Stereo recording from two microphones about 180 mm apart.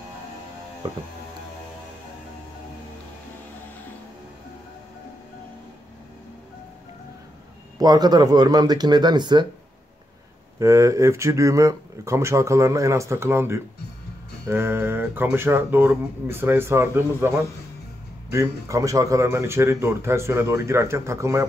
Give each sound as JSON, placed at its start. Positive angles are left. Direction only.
{"t": 7.8, "sound": "speech", "side_deg": -20}
{"t": 10.6, "sound": "speech", "side_deg": -15}
{"t": 18.3, "sound": "speech", "side_deg": -15}